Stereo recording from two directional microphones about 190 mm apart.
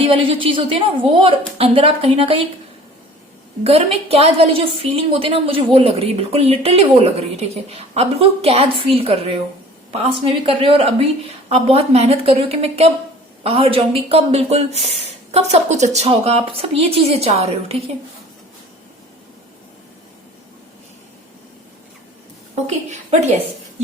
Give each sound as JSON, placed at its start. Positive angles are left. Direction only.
{"t": 0.0, "sound": "a woman's voice", "side_deg": -30}
{"t": 3.6, "sound": "a woman's voice", "side_deg": -30}